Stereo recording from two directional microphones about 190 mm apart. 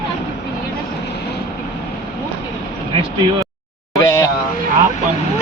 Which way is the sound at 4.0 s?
15° left (ahead or behind).